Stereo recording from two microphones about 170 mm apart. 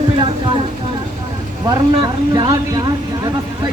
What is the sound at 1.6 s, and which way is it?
Speech, 25° right (ahead or behind).